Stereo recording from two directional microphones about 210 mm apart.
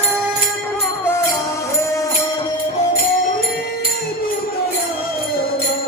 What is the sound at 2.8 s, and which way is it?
Music, 35° left (ahead or behind).